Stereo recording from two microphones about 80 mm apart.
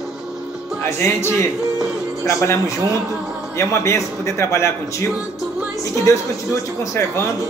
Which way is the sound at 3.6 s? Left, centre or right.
Left.